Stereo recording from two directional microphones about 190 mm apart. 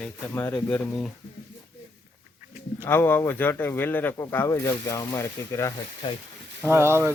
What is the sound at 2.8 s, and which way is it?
Speech, 10° left (ahead or behind).